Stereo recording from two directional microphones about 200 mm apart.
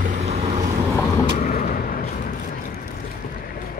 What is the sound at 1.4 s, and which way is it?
Vehicle, 40° left (ahead or behind).